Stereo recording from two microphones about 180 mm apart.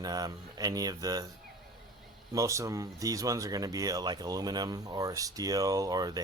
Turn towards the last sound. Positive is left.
turn(degrees=-20)  # may be behind; listen again after turning